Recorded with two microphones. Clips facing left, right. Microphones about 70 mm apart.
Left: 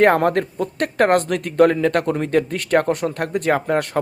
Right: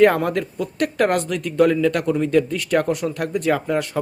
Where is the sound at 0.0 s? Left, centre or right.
Left.